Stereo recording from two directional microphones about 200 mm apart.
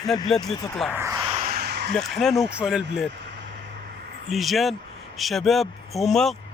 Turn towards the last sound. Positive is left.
turn(degrees=0)  # may be behind; listen again after turning